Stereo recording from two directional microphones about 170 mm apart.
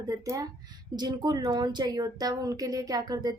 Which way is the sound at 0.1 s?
20° right (ahead or behind).